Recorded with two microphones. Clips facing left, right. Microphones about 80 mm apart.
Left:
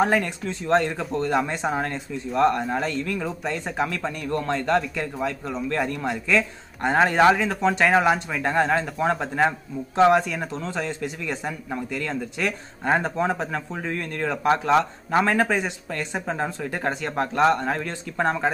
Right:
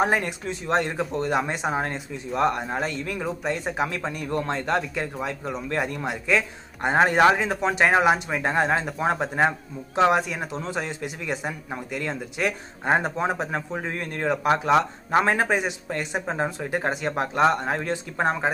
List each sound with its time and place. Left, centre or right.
0.0 s a man's voice: right